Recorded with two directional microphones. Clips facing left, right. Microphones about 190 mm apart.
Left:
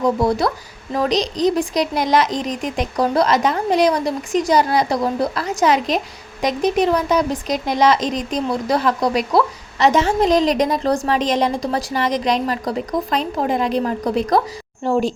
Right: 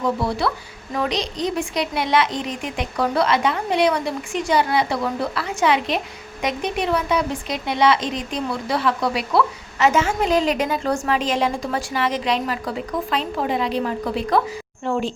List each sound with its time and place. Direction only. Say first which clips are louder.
0.3 s speech: left 4 dB; 45° left (ahead or behind)